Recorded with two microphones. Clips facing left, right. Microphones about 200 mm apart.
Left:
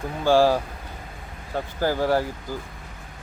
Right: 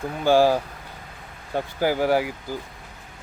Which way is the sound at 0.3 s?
15° right (ahead or behind).